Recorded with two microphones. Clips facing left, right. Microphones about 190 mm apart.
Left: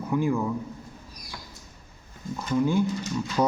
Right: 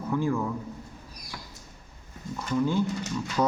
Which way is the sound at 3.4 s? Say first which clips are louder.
Left 1 dB; 20° left (ahead or behind).